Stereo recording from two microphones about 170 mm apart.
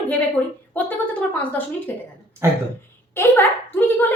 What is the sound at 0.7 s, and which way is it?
A woman's voice, 10° left (ahead or behind).